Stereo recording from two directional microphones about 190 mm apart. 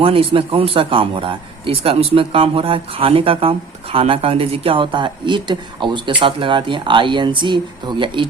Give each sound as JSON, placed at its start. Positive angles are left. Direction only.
{"t": 0.0, "sound": "speech", "side_deg": -30}